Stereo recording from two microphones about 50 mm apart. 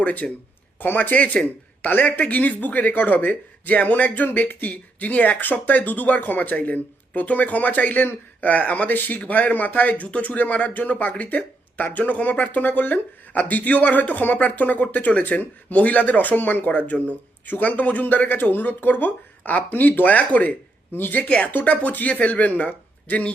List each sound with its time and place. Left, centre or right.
0.0 s speech: left
1.1 s speech: left
20.9 s speech: left
21.2 s speech: left